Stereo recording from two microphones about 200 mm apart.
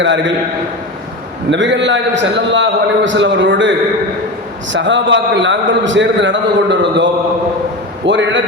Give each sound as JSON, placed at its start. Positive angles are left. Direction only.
{"t": 0.0, "sound": "a man's voice", "side_deg": -65}
{"t": 1.5, "sound": "a man's voice", "side_deg": -65}
{"t": 4.7, "sound": "a man's voice", "side_deg": -65}